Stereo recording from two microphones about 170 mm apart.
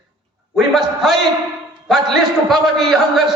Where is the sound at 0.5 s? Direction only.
Centre (ahead or behind).